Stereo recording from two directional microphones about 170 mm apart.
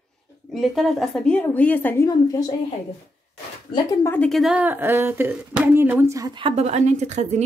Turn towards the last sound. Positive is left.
turn(degrees=-40)  # may be behind; listen again after turning